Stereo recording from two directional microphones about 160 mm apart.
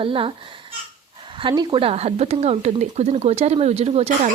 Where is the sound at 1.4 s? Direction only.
25° right (ahead or behind); by 4.3 s 45° right (ahead or behind).